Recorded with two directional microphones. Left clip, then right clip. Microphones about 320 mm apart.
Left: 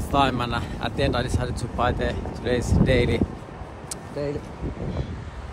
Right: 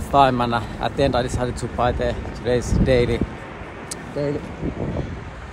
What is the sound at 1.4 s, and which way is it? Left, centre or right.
Speech, right.